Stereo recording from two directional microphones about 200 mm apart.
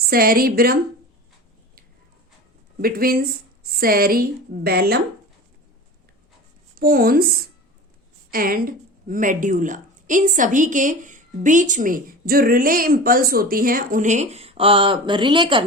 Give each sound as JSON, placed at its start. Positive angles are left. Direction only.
{"t": 0.0, "sound": "a woman's voice", "side_deg": -50}
{"t": 2.7, "sound": "a woman's voice", "side_deg": -50}
{"t": 6.7, "sound": "a woman's voice", "side_deg": -45}